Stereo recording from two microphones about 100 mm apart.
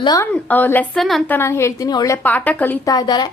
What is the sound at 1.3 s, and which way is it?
Speech, 25° left (ahead or behind).